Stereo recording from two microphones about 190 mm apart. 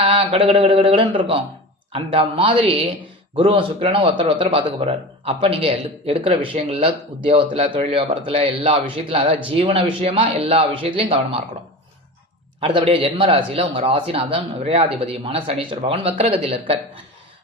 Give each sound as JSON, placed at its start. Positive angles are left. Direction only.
{"t": 0.0, "sound": "a man's voice", "side_deg": -30}
{"t": 12.5, "sound": "a man's voice", "side_deg": -30}